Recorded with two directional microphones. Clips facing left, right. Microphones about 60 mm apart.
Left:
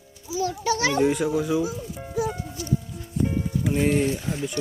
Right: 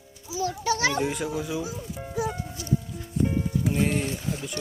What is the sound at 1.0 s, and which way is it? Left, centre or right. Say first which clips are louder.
Speech: left 6 dB; centre.